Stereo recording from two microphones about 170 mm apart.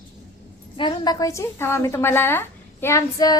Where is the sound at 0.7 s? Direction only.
30° left (ahead or behind).